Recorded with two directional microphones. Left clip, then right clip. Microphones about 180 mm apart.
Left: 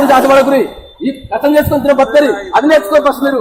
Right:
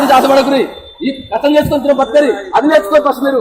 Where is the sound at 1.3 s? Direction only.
15° left (ahead or behind).